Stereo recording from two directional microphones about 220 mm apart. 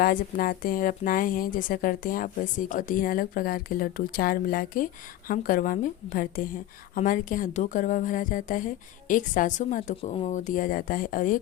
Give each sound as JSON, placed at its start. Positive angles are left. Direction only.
{"t": 0.0, "sound": "a woman's voice", "side_deg": 40}